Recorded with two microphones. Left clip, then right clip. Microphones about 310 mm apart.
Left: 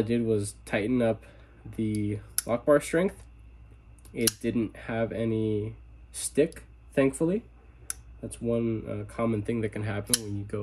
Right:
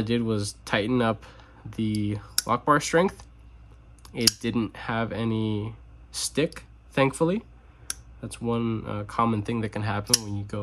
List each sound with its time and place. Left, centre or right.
0.0 s speech: centre
6.1 s a sound: centre
8.5 s speech: centre